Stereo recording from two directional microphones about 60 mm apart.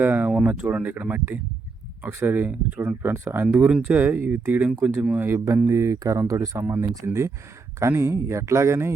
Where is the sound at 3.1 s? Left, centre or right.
Right.